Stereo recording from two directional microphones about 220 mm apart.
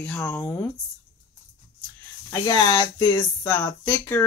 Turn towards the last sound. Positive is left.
turn(degrees=10)  # may be behind; listen again after turning